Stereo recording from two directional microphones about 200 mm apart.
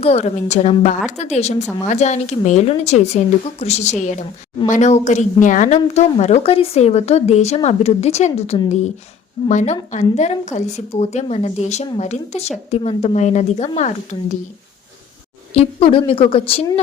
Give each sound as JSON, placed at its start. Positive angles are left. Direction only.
{"t": 0.0, "sound": "speech", "side_deg": 30}
{"t": 15.5, "sound": "a woman's voice", "side_deg": 25}